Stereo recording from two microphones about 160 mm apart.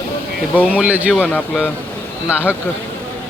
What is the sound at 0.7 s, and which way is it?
Speech, 5° right (ahead or behind).